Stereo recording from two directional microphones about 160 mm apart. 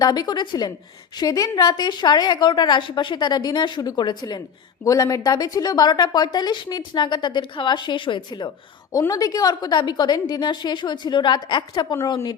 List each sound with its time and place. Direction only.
0.0 s a woman's voice: 25° left (ahead or behind)